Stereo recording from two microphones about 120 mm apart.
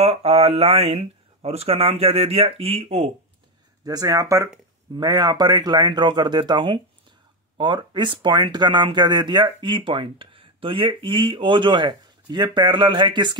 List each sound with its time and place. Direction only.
0.0 s speech: 55° right (ahead or behind)
3.8 s a man's voice: 30° right (ahead or behind)